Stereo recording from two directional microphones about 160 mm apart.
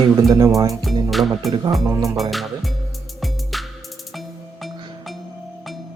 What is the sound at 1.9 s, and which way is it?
Speech, 20° right (ahead or behind).